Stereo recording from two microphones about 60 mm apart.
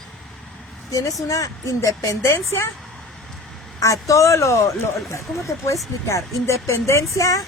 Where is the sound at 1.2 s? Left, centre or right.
Left.